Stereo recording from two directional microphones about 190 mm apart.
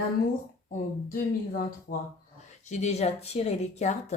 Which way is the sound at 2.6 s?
35° left (ahead or behind).